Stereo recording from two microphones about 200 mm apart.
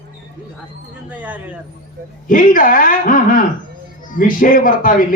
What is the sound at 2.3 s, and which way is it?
Speech, 40° left (ahead or behind).